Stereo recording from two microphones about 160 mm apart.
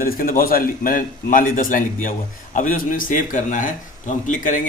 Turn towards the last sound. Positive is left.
turn(degrees=50)  # may be behind; listen again after turning